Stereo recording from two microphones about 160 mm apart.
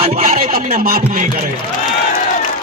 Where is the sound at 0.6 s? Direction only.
65° right (ahead or behind).